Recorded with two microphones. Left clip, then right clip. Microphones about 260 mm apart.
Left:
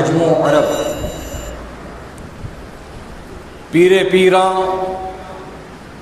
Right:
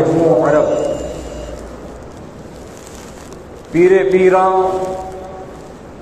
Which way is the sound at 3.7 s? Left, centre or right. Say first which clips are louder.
Even; left.